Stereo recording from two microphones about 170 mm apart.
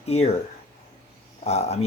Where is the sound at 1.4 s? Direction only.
40° left (ahead or behind).